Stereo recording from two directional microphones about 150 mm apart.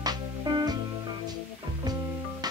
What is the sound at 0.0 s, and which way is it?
Music, 25° right (ahead or behind).